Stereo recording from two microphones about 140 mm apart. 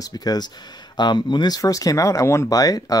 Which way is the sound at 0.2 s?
30° left (ahead or behind).